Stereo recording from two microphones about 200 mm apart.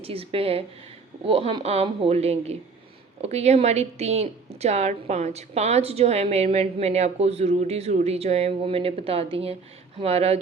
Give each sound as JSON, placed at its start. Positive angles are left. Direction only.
{"t": 0.0, "sound": "a woman's voice", "side_deg": -30}